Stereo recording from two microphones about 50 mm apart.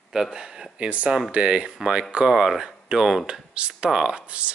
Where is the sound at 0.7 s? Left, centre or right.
Right; by 3.3 s centre.